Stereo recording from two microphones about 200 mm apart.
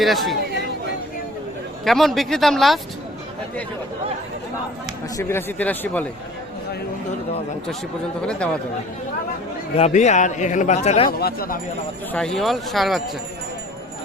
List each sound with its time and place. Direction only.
0.0 s speech: centre (ahead or behind)
1.8 s speech: centre (ahead or behind)
5.1 s speech: 10° left (ahead or behind)
9.7 s speech: 35° left (ahead or behind)
11.2 s speech: 50° left (ahead or behind)
12.1 s speech: 5° left (ahead or behind)